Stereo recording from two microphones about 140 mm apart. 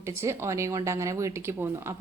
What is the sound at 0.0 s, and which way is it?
Speech, 20° right (ahead or behind).